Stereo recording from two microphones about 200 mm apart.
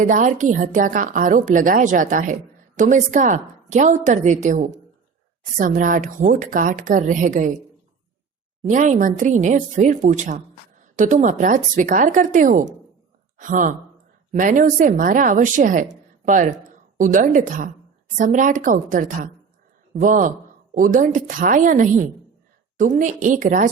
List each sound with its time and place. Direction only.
0.0 s a woman's voice: 40° right (ahead or behind)
8.6 s a woman's voice: 40° right (ahead or behind)